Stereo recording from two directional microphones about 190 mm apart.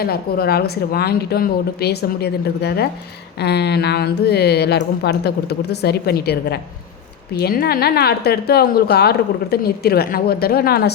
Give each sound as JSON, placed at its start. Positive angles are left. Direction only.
{"t": 0.0, "sound": "a woman's voice", "side_deg": 55}